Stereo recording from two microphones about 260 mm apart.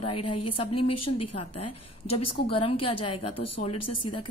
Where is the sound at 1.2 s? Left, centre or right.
Left.